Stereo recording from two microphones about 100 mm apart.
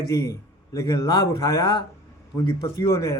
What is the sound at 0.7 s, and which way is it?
A man's voice, 35° left (ahead or behind).